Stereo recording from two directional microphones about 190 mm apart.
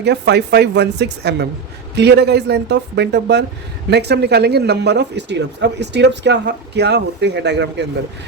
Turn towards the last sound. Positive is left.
turn(degrees=-65)  # may be behind; listen again after turning